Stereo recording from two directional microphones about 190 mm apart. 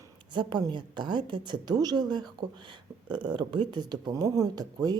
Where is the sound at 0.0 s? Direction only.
25° right (ahead or behind).